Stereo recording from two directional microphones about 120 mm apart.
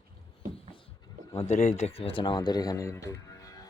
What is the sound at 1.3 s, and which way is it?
Speech, 75° left (ahead or behind).